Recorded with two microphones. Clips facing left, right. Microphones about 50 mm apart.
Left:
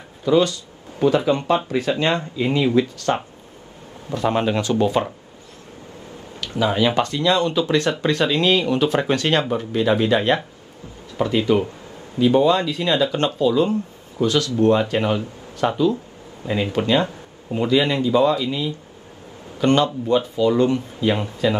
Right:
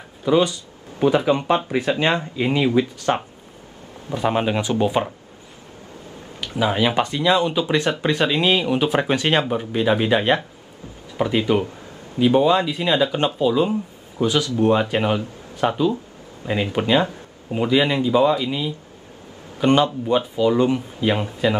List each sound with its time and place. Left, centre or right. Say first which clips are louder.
0.2 s speech: left 1 dB; centre
6.4 s speech: left 1 dB; centre